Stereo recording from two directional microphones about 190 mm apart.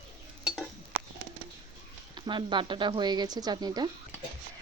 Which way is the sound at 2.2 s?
25° right (ahead or behind).